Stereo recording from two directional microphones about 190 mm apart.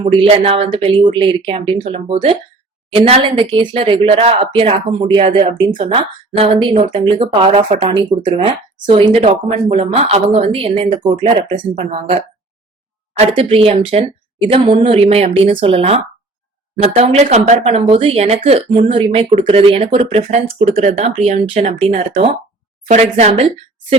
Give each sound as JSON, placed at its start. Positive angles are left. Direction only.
{"t": 0.2, "sound": "speech", "side_deg": -30}